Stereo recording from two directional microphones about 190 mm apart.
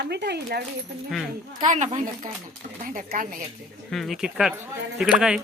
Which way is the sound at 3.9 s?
Centre (ahead or behind).